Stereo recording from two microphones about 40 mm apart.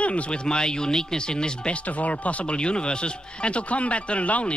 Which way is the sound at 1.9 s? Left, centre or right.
Left.